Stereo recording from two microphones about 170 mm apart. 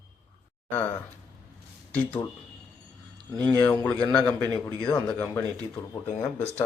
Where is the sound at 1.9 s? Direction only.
10° left (ahead or behind).